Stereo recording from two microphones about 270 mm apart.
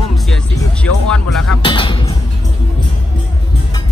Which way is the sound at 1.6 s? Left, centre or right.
Centre.